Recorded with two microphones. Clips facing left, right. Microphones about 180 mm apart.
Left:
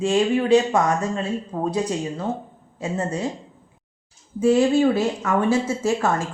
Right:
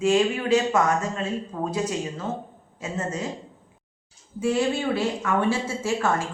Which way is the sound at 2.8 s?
35° left (ahead or behind).